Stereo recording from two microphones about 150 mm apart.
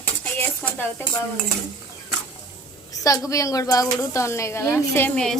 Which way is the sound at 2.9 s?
20° left (ahead or behind).